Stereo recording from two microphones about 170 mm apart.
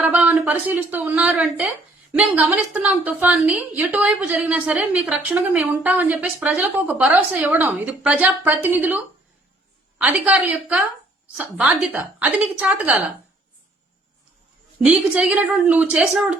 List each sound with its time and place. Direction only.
0.0 s a woman's voice: 10° right (ahead or behind)
10.0 s a woman's voice: 10° right (ahead or behind)
14.8 s a woman's voice: 5° right (ahead or behind)